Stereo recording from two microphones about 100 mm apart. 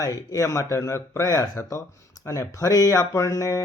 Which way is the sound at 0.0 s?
35° left (ahead or behind).